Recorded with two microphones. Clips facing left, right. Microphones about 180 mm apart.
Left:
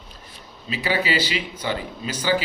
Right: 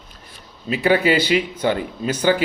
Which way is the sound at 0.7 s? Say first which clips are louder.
Right 7 dB; 55° right (ahead or behind).